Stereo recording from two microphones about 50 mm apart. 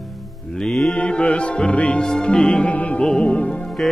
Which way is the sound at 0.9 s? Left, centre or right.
Left.